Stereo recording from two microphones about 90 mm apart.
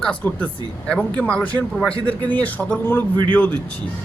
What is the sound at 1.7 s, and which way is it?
Speech, 5° left (ahead or behind).